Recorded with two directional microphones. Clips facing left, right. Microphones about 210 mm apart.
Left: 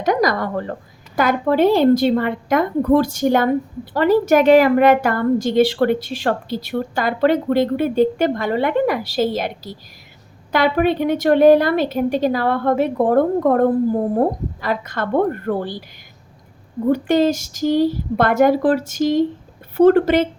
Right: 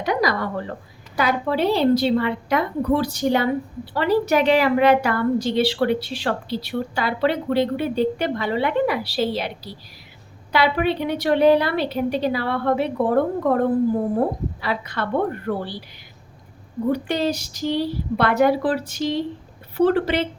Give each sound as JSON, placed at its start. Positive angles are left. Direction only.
{"t": 0.0, "sound": "a woman's voice", "side_deg": 45}
{"t": 16.9, "sound": "a woman's voice", "side_deg": 45}